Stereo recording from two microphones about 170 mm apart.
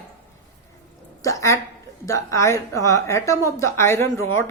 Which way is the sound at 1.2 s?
20° left (ahead or behind).